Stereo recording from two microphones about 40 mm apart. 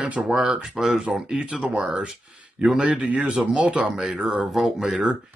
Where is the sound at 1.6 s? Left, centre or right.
Right.